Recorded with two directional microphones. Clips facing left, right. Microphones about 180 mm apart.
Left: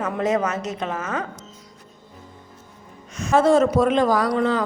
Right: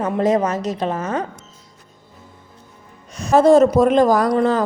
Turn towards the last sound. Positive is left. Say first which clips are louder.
# right 4 dB
turn(degrees=-45)  # may be behind; listen again after turning